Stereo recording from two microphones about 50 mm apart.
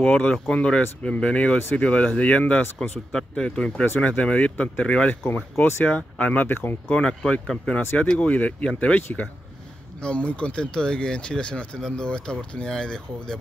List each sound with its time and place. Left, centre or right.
0.0 s speech: left
5.2 s speech: left
6.5 s speech: left
6.9 s speech: centre